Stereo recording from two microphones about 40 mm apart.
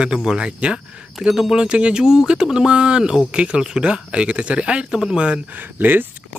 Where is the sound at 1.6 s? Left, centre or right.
Right.